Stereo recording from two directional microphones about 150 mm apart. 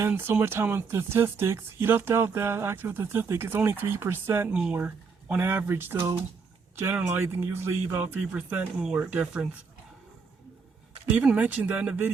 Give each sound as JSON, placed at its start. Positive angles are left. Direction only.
{"t": 0.0, "sound": "speech", "side_deg": -15}
{"t": 11.2, "sound": "speech", "side_deg": -5}